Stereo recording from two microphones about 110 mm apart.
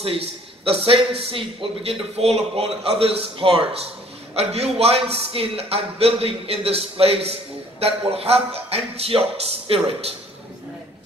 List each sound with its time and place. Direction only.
0.7 s a man's voice: 60° right (ahead or behind)
4.4 s a man's voice: 70° right (ahead or behind)